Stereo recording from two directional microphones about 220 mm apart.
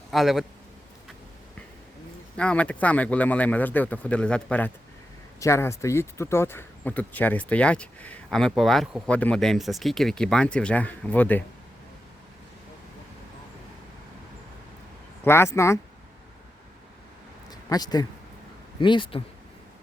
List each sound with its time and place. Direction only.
0.1 s speech: centre (ahead or behind)
2.3 s speech: 5° left (ahead or behind)
15.2 s speech: 10° left (ahead or behind)
17.5 s a sound: 15° left (ahead or behind)
18.8 s speech: 20° left (ahead or behind)